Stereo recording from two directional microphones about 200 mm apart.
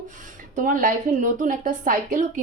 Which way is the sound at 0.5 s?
40° right (ahead or behind).